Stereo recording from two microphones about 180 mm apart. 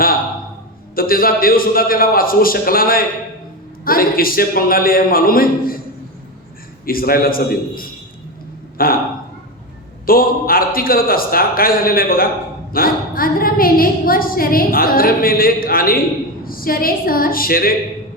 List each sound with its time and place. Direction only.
0.9 s a woman's voice: 55° left (ahead or behind)
6.8 s a woman's voice: 55° left (ahead or behind)
10.1 s a woman's voice: 55° left (ahead or behind)